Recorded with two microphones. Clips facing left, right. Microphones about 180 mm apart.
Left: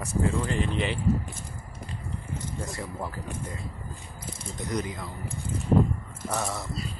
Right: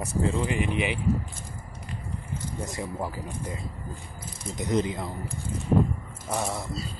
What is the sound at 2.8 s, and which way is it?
Speech, 10° right (ahead or behind).